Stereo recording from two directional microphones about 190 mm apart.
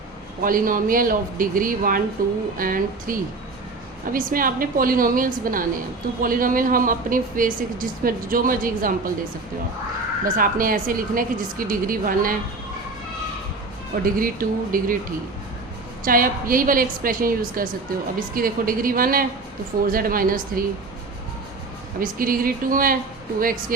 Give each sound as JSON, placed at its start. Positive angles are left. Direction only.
{"t": 0.4, "sound": "speech", "side_deg": -45}
{"t": 10.2, "sound": "speech", "side_deg": -45}
{"t": 14.0, "sound": "speech", "side_deg": -50}
{"t": 16.0, "sound": "speech", "side_deg": -45}
{"t": 22.0, "sound": "speech", "side_deg": -50}